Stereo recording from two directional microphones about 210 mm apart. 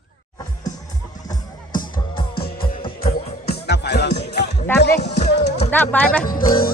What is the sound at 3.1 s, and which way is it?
Music, 30° left (ahead or behind).